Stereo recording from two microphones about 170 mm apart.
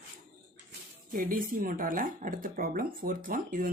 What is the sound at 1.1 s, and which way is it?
Speech, 55° right (ahead or behind).